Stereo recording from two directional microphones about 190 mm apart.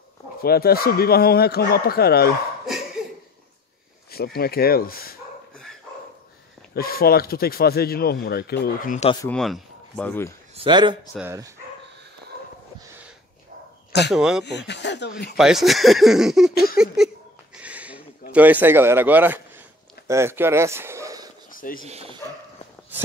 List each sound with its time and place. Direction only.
0.4 s speech: 55° left (ahead or behind)
4.1 s speech: 55° left (ahead or behind)
6.7 s speech: 50° left (ahead or behind)
9.3 s speech: 5° left (ahead or behind)
10.5 s a man's voice: 25° right (ahead or behind)
12.8 s a sound: 10° right (ahead or behind)
14.1 s speech: 5° right (ahead or behind)
14.4 s speech: 65° left (ahead or behind)
15.3 s speech: centre (ahead or behind)
17.6 s a sound: 5° right (ahead or behind)
18.3 s a man's voice: 10° right (ahead or behind)
21.5 s a sound: 45° left (ahead or behind)